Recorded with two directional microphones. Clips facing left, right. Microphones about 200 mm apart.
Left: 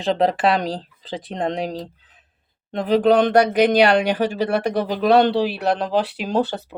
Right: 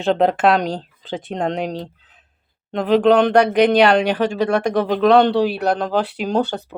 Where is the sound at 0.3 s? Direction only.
35° left (ahead or behind).